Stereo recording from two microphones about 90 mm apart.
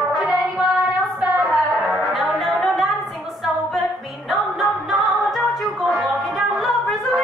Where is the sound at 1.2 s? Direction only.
15° right (ahead or behind).